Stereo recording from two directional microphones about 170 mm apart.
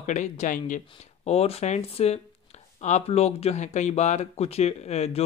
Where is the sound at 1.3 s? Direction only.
35° left (ahead or behind).